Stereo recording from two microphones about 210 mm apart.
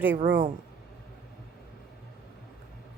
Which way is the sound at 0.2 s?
45° right (ahead or behind).